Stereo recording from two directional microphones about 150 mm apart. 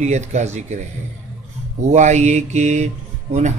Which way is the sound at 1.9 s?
50° right (ahead or behind).